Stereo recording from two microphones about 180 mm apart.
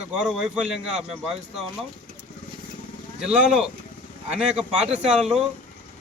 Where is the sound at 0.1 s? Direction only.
5° right (ahead or behind).